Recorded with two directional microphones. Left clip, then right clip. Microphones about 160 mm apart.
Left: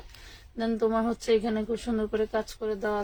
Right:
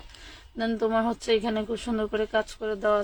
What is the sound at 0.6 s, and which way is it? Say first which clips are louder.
Speech: right 1 dB; 35° right (ahead or behind).